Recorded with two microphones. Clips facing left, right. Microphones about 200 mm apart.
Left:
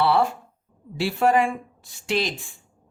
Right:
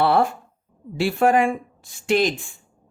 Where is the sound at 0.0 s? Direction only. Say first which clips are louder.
Right 2 dB; 50° right (ahead or behind).